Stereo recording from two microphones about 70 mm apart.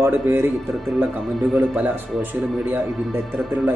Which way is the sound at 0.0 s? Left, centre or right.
Right.